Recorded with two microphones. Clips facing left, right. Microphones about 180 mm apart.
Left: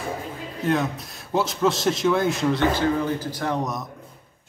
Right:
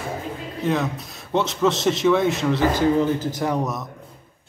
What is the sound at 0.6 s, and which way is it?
Speech, centre (ahead or behind).